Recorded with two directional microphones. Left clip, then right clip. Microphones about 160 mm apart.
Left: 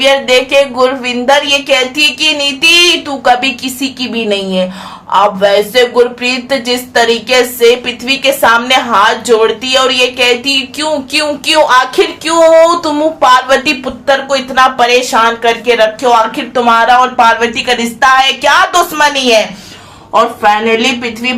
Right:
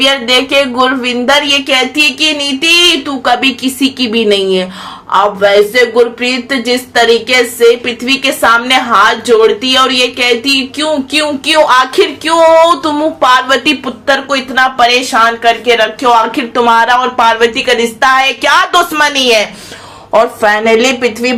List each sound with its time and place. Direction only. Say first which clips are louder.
0.0 s speech: left 1 dB; 10° right (ahead or behind)
5.4 s speech: right 1 dB; centre (ahead or behind)
16.6 s speech: even; 25° right (ahead or behind)
17.0 s speech: left 1 dB; 15° right (ahead or behind)
20.4 s a woman's voice: right 1 dB; 35° right (ahead or behind)